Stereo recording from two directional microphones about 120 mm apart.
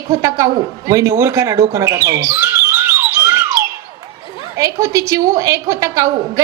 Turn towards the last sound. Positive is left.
turn(degrees=-25)  # may be behind; listen again after turning